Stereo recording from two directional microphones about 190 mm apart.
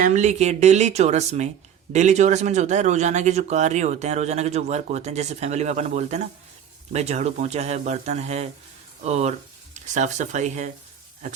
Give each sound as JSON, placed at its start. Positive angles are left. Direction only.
{"t": 0.0, "sound": "a man's voice", "side_deg": -40}